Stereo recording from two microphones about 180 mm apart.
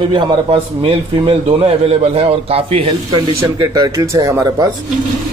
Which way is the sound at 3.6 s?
20° right (ahead or behind).